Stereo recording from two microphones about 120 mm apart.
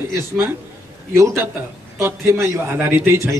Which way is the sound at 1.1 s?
20° right (ahead or behind).